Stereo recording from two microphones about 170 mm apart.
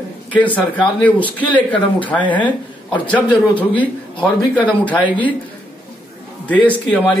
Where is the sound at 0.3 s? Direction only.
10° left (ahead or behind).